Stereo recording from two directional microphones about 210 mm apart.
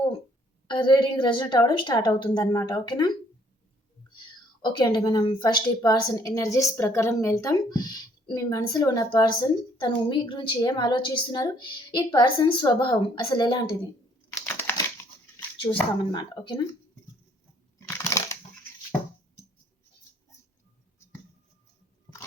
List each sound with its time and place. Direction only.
0.7 s a woman's voice: 20° left (ahead or behind)
4.6 s a woman's voice: 20° left (ahead or behind)
15.6 s a woman's voice: 20° left (ahead or behind)
17.7 s a sound: 10° left (ahead or behind)